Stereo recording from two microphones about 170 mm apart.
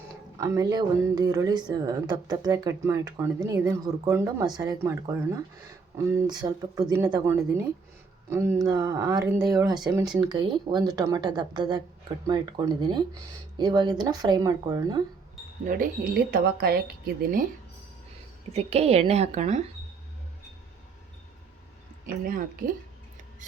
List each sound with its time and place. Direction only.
0.3 s a woman's voice: 20° right (ahead or behind)
15.6 s speech: 55° right (ahead or behind)
18.5 s a woman's voice: 40° right (ahead or behind)
22.0 s speech: 55° right (ahead or behind)